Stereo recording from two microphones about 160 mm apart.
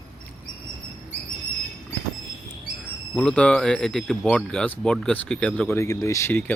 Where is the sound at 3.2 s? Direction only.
5° left (ahead or behind).